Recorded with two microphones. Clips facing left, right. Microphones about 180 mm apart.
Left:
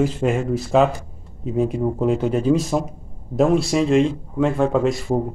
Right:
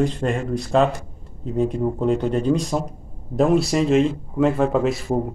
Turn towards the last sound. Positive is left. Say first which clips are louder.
# left 1 dB
turn(degrees=0)  # may be behind; listen again after turning